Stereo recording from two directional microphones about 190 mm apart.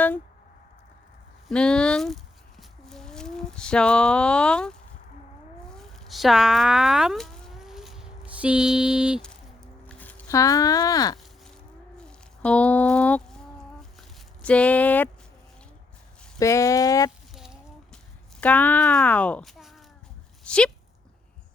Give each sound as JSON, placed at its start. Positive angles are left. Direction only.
{"t": 1.5, "sound": "a sound", "side_deg": 5}
{"t": 5.6, "sound": "cat", "side_deg": 0}
{"t": 9.8, "sound": "speech", "side_deg": 10}
{"t": 11.9, "sound": "a sound", "side_deg": 5}
{"t": 14.4, "sound": "speech", "side_deg": 5}
{"t": 16.4, "sound": "speech", "side_deg": 15}
{"t": 17.3, "sound": "chicken", "side_deg": 0}
{"t": 18.3, "sound": "speech", "side_deg": 10}
{"t": 20.4, "sound": "a sound", "side_deg": 5}